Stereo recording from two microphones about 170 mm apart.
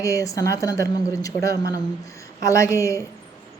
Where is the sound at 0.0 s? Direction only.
20° left (ahead or behind).